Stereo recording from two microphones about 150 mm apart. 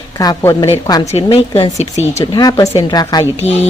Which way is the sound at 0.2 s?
20° left (ahead or behind).